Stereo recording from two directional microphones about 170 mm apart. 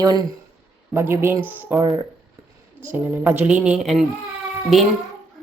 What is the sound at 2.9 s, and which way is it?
Speech, 10° right (ahead or behind).